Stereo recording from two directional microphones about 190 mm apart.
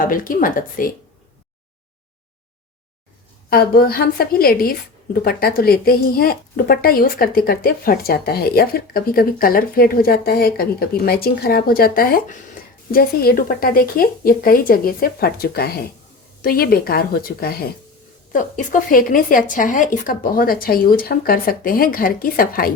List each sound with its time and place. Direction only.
0.0 s speech: 45° left (ahead or behind)
3.5 s speech: 55° left (ahead or behind)